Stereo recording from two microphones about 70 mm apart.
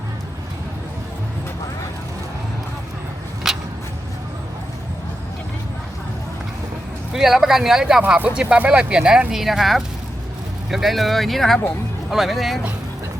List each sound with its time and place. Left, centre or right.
3.4 s a sound: centre
7.1 s speech: centre
8.0 s speech: centre